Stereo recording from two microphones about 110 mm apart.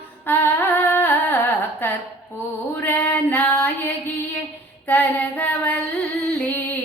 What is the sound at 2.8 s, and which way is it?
Female singing, 15° left (ahead or behind).